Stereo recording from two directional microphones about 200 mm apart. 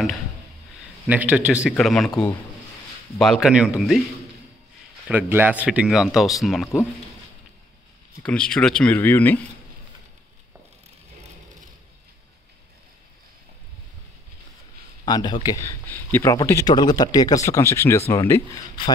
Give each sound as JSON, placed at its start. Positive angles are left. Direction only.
{"t": 1.0, "sound": "speech", "side_deg": -5}
{"t": 3.2, "sound": "speech", "side_deg": 0}
{"t": 5.0, "sound": "speech", "side_deg": -10}
{"t": 8.3, "sound": "speech", "side_deg": 5}
{"t": 15.0, "sound": "speech", "side_deg": 20}